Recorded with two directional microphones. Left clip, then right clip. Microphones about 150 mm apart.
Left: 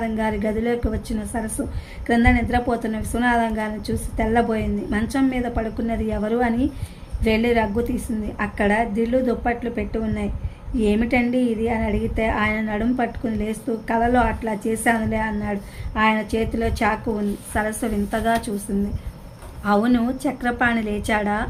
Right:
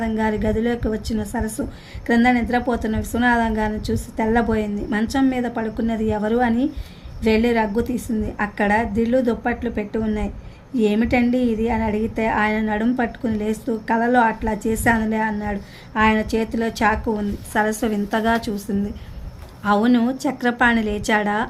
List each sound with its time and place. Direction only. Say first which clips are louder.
0.0 s a woman's voice: right 1 dB; 45° right (ahead or behind)
19.6 s a woman's voice: right 2 dB; 45° right (ahead or behind)